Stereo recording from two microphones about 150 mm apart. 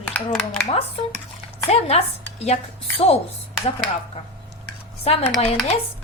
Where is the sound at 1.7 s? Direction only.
45° left (ahead or behind).